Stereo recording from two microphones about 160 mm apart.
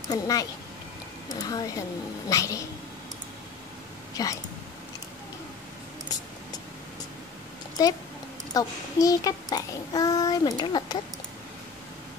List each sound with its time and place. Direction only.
0.1 s child singing: 20° left (ahead or behind)
4.2 s child singing: 25° left (ahead or behind)
7.8 s child singing: 25° left (ahead or behind)